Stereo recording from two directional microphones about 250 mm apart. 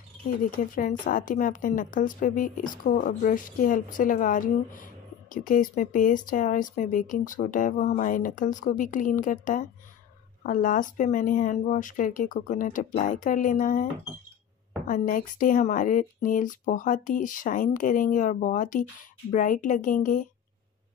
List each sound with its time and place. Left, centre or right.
0.4 s speech: left
14.9 s speech: left